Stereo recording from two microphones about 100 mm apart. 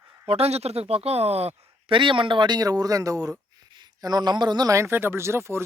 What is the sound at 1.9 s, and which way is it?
Speech, 55° right (ahead or behind).